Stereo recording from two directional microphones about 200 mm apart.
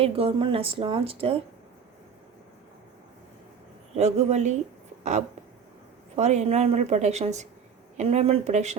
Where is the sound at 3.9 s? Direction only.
35° right (ahead or behind).